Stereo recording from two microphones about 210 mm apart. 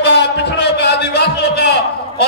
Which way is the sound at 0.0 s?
55° left (ahead or behind).